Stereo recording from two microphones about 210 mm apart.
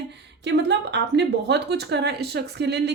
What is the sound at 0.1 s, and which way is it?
Speech, 55° right (ahead or behind).